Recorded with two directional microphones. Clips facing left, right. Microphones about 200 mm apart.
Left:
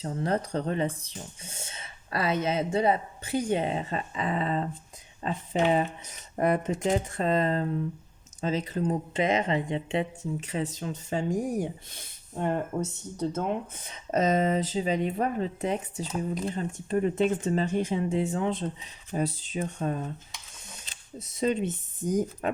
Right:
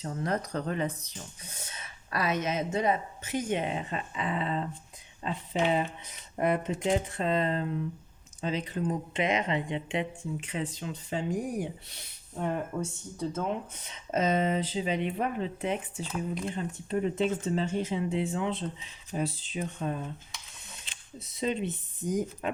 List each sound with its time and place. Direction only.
0.0 s speech: 30° left (ahead or behind)